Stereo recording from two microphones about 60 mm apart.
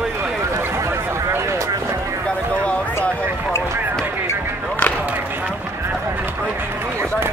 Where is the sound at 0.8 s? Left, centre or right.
Right.